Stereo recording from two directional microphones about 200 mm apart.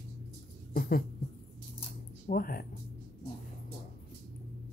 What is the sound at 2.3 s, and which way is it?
Speech, 50° left (ahead or behind).